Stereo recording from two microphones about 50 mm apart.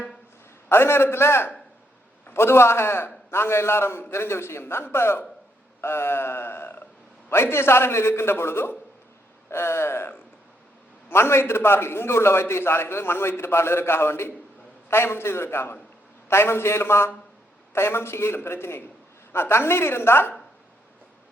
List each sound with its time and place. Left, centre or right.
0.7 s a man's voice: left
5.8 s a sound: left
7.3 s a man's voice: left
11.1 s a man's voice: left
16.3 s a man's voice: left